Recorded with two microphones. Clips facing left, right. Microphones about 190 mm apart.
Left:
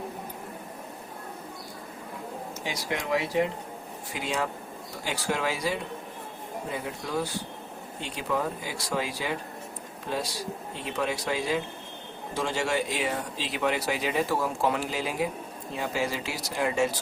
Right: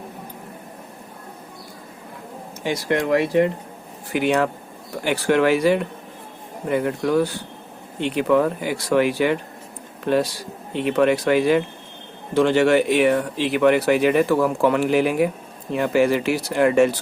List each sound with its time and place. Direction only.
2.9 s speech: 60° right (ahead or behind)